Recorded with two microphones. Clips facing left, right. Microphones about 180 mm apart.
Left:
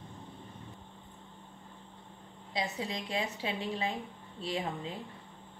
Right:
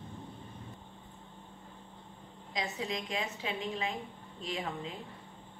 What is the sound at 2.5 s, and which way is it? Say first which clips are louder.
A woman's voice: left 1 dB; 35° left (ahead or behind).